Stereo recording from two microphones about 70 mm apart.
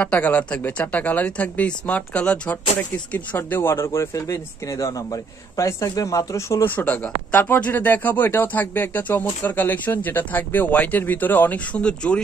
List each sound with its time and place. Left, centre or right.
0.0 s speech: left
3.3 s speech: left
6.6 s speech: left